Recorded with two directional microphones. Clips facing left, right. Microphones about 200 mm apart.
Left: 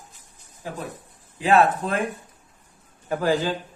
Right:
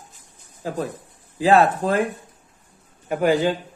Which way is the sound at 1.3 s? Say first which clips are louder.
Right 2 dB; 35° right (ahead or behind).